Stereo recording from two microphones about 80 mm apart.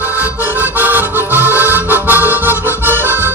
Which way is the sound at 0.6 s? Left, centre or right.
Right.